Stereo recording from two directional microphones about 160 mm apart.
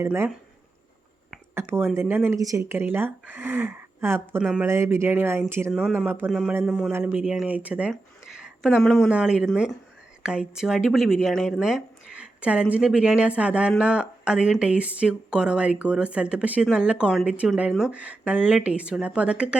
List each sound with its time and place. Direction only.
0.0 s speech: 15° right (ahead or behind)
1.5 s speech: 15° right (ahead or behind)
4.4 s speech: centre (ahead or behind)
4.6 s speech: 15° right (ahead or behind)